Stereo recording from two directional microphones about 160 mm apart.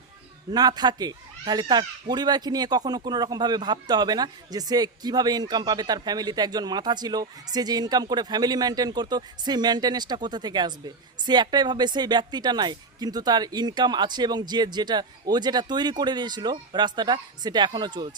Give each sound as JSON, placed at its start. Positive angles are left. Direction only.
{"t": 0.5, "sound": "speech", "side_deg": -25}